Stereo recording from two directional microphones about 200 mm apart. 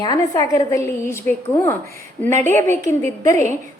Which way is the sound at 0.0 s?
20° left (ahead or behind).